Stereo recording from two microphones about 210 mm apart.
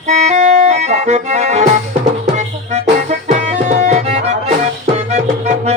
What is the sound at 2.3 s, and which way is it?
Music, 35° right (ahead or behind).